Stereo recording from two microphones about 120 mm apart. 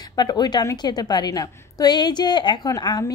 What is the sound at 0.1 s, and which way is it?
A woman's voice, 35° left (ahead or behind).